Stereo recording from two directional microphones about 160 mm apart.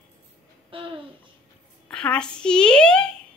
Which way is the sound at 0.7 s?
35° right (ahead or behind).